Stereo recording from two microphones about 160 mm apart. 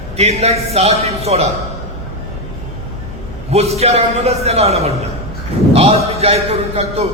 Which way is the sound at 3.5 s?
40° right (ahead or behind).